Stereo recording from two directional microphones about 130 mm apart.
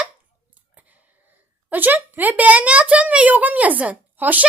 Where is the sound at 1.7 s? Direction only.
15° right (ahead or behind).